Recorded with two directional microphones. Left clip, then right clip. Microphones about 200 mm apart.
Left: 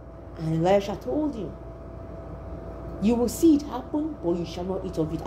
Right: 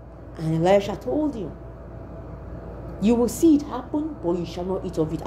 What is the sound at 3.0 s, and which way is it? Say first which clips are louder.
A woman's voice: right 2 dB; 15° right (ahead or behind).